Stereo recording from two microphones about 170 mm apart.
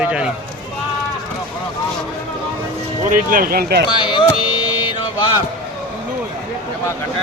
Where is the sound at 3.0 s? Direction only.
55° right (ahead or behind); by 3.9 s 70° right (ahead or behind).